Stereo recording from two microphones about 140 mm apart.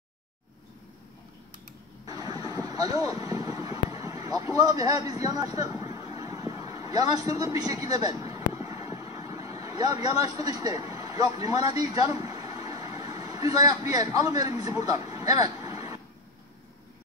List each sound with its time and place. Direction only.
2.0 s vehicle: 25° right (ahead or behind)
12.1 s speech: 25° right (ahead or behind)